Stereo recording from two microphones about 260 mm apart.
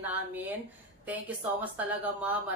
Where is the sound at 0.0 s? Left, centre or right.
Centre.